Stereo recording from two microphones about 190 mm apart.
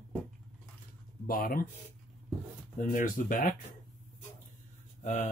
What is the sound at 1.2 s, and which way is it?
Speech, 50° left (ahead or behind).